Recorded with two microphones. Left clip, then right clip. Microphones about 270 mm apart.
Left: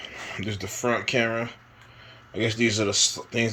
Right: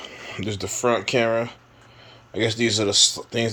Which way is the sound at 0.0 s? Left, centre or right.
Centre.